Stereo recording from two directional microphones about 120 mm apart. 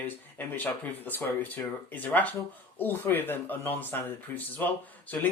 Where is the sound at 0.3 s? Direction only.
15° left (ahead or behind).